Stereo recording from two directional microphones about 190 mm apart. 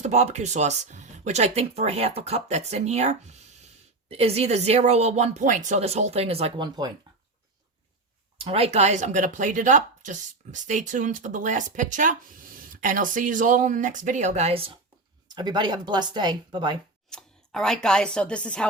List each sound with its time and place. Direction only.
0.0 s speech: 35° right (ahead or behind)
8.4 s a woman's voice: 30° right (ahead or behind)
17.1 s speech: centre (ahead or behind)